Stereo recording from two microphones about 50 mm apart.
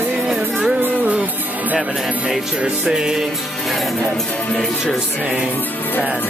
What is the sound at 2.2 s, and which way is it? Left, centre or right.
Music, centre.